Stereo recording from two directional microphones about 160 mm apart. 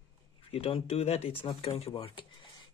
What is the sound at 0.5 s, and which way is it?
Speech, 35° left (ahead or behind).